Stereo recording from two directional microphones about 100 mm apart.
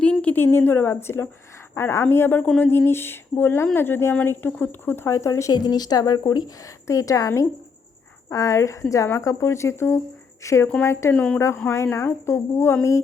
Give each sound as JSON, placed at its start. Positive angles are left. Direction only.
{"t": 0.0, "sound": "a sound", "side_deg": 10}
{"t": 0.4, "sound": "a woman's voice", "side_deg": 20}
{"t": 11.1, "sound": "speech", "side_deg": 15}
{"t": 11.3, "sound": "speech", "side_deg": 30}